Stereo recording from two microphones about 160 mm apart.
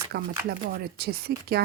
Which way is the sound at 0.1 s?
85° right.